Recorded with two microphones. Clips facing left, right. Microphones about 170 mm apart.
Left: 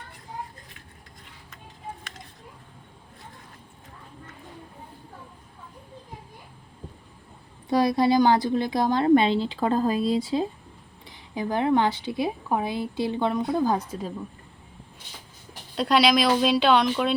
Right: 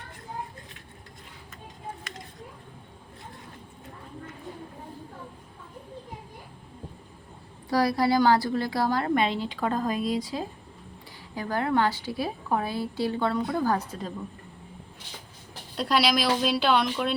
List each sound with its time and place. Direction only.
7.7 s a woman's voice: 20° left (ahead or behind)
15.7 s speech: centre (ahead or behind)